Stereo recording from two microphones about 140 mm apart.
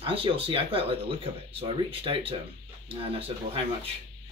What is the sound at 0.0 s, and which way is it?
Speech, 40° right (ahead or behind).